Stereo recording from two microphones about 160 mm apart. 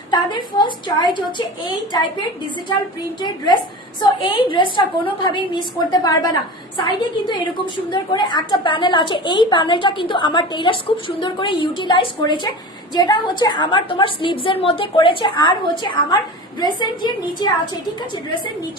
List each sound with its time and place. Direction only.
0.1 s a woman's voice: 30° left (ahead or behind)